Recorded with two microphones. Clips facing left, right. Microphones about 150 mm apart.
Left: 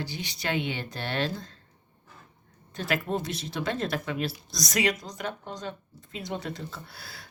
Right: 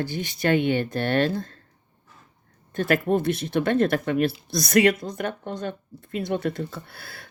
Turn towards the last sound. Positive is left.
turn(degrees=-55)  # may be behind; listen again after turning